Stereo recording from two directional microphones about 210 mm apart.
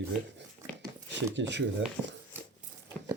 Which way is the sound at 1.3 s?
55° right (ahead or behind).